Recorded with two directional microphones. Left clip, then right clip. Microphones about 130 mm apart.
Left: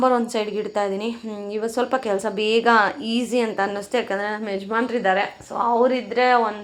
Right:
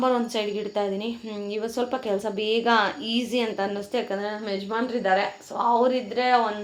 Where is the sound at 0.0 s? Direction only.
25° left (ahead or behind).